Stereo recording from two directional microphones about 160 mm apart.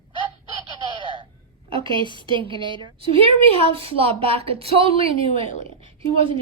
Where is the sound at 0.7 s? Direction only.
30° right (ahead or behind).